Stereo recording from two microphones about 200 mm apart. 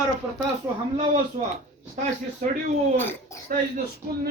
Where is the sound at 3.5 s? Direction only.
40° right (ahead or behind).